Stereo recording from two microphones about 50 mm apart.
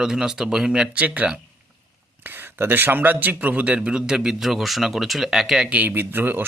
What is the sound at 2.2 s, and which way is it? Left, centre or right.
Speech, right.